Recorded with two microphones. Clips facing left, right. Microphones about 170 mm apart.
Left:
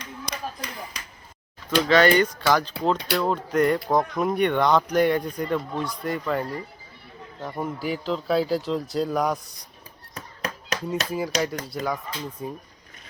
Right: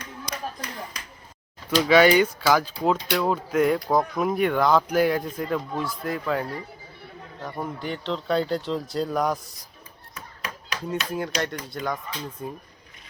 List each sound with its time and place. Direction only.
1.9 s speech: 10° right (ahead or behind)
10.2 s a sound: 40° left (ahead or behind)
10.8 s speech: centre (ahead or behind)